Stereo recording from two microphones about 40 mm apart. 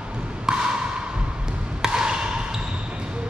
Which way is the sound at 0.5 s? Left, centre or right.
Centre.